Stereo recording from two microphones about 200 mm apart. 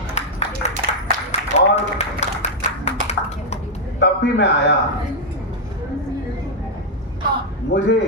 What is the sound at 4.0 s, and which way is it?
Speech, 60° left (ahead or behind).